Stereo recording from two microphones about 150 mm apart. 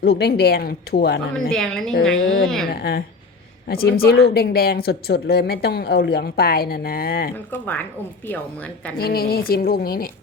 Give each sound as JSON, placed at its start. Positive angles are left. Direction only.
{"t": 0.0, "sound": "speech", "side_deg": 90}
{"t": 1.5, "sound": "a woman's voice", "side_deg": 5}
{"t": 3.7, "sound": "speech", "side_deg": 90}
{"t": 7.3, "sound": "a woman's voice", "side_deg": 10}
{"t": 9.0, "sound": "speech", "side_deg": 90}